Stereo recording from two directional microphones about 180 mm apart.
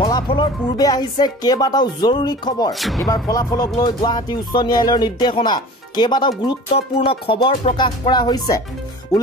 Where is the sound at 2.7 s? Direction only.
Centre (ahead or behind).